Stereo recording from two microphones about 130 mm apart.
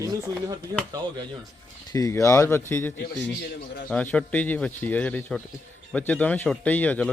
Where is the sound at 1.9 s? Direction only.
25° left (ahead or behind).